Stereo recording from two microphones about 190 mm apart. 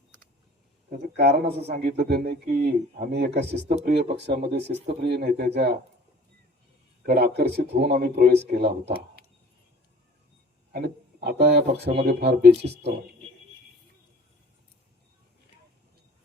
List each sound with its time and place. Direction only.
1.2 s speech: 60° right (ahead or behind)
7.0 s speech: 55° right (ahead or behind)
10.7 s speech: 60° right (ahead or behind)